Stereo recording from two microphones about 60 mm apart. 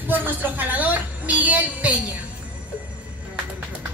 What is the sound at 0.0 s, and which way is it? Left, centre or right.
Music, right.